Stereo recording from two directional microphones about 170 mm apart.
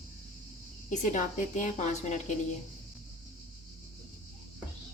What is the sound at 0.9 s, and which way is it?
A woman's voice, 45° left (ahead or behind).